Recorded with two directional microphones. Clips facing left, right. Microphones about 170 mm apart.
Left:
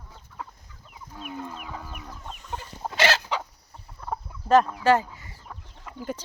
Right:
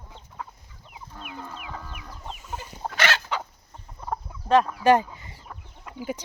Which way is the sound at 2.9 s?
30° left (ahead or behind).